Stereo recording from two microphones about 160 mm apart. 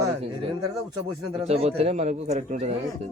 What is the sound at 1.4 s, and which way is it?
Speech, 40° right (ahead or behind).